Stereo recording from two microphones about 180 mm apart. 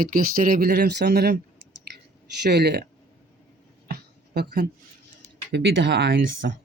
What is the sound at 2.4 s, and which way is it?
Speech, 65° right (ahead or behind).